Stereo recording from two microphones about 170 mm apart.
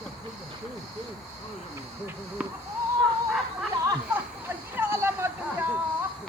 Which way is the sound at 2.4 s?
5° right (ahead or behind).